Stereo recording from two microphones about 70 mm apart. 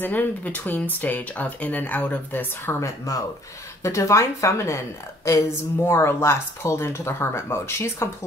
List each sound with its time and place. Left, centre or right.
0.0 s speech: left
5.9 s speech: left